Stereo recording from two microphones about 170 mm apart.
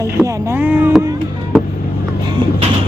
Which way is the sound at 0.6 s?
10° right (ahead or behind).